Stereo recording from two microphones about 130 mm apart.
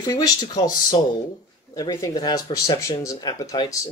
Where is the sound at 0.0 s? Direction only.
25° left (ahead or behind).